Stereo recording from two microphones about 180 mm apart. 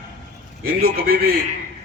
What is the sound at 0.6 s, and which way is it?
Speech, 60° right (ahead or behind).